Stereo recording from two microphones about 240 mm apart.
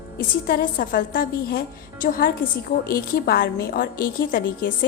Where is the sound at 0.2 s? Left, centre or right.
Left.